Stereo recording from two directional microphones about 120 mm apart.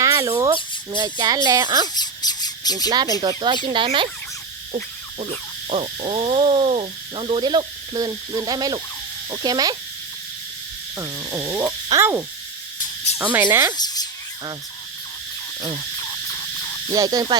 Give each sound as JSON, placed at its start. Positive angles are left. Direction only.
{"t": 0.0, "sound": "a sound", "side_deg": -25}
{"t": 1.5, "sound": "speech", "side_deg": -35}
{"t": 2.0, "sound": "squawk", "side_deg": 35}
{"t": 3.2, "sound": "owl", "side_deg": -40}
{"t": 5.2, "sound": "owl", "side_deg": -65}
{"t": 9.3, "sound": "speech", "side_deg": -35}
{"t": 10.9, "sound": "frog", "side_deg": -25}
{"t": 13.3, "sound": "a sound", "side_deg": -15}
{"t": 13.7, "sound": "a sound", "side_deg": 35}
{"t": 16.9, "sound": "speech", "side_deg": -35}